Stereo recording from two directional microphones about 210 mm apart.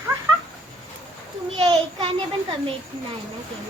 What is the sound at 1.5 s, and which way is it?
Speech, 20° right (ahead or behind).